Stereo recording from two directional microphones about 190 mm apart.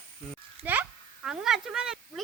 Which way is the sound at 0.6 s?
30° right (ahead or behind).